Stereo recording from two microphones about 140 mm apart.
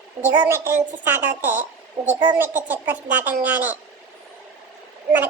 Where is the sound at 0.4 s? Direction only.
15° right (ahead or behind).